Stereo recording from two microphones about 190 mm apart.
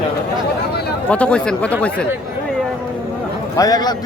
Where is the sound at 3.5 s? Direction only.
20° left (ahead or behind).